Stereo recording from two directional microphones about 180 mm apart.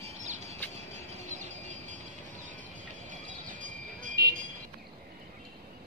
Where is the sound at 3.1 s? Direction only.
45° right (ahead or behind).